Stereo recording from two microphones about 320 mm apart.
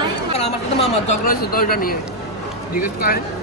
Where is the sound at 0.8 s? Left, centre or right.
Left.